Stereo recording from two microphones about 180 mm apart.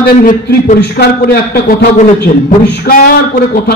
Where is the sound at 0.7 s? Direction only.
65° left (ahead or behind).